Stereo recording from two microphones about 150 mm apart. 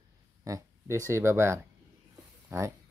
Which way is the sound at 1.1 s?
20° right (ahead or behind).